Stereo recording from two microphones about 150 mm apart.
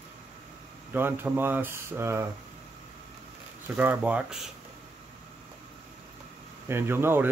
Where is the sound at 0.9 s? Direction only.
15° right (ahead or behind).